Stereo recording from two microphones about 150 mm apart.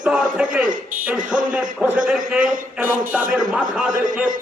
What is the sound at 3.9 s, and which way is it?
Speech, 60° right (ahead or behind).